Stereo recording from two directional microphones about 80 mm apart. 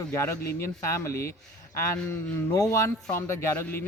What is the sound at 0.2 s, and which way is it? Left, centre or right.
Speech, left.